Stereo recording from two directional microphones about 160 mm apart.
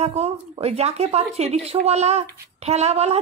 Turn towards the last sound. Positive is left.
turn(degrees=-40)  # may be behind; listen again after turning